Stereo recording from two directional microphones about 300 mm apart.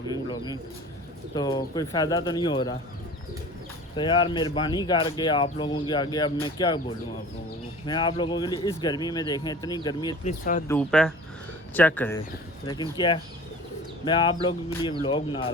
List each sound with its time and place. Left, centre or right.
0.1 s bird: centre
1.3 s speech: centre
3.9 s speech: centre
10.7 s speech: centre